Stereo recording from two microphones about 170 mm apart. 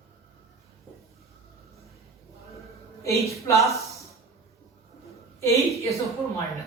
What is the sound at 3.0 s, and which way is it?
Speech, 15° left (ahead or behind).